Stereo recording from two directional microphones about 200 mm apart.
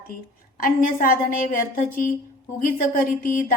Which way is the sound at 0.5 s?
45° left (ahead or behind).